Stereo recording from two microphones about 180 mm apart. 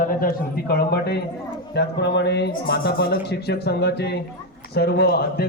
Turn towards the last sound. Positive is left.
turn(degrees=65)  # may be behind; listen again after turning